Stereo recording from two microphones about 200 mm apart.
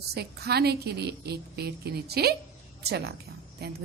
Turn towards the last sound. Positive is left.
turn(degrees=-50)  # may be behind; listen again after turning